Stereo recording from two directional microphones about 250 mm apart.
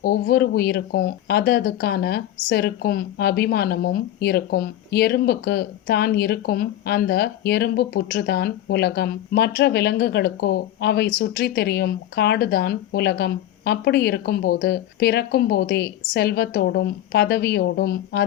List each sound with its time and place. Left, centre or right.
0.0 s speech: left